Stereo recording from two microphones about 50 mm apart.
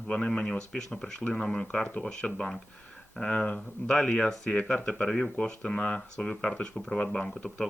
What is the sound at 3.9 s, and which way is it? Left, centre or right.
Speech, centre.